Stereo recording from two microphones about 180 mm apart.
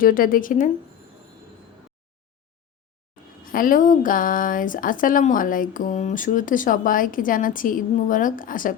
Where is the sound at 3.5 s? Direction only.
50° left (ahead or behind).